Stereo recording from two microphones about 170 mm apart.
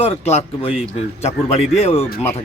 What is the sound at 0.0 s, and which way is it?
Speech, 35° left (ahead or behind).